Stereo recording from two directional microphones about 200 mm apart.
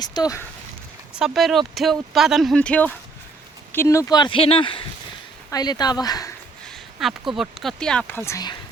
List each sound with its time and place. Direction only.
0.0 s speech: 20° left (ahead or behind)
1.2 s speech: centre (ahead or behind); by 6.3 s 20° left (ahead or behind)
6.7 s speech: centre (ahead or behind); by 8.5 s 15° left (ahead or behind)